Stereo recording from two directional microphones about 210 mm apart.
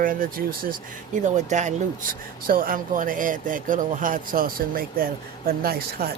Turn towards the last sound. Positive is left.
turn(degrees=-45)  # may be behind; listen again after turning